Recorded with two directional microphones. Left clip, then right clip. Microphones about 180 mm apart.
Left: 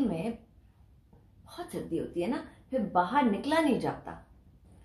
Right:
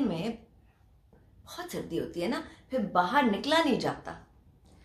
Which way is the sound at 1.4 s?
10° right (ahead or behind).